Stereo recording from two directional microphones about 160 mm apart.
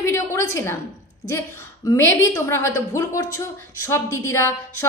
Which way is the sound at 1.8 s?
20° left (ahead or behind).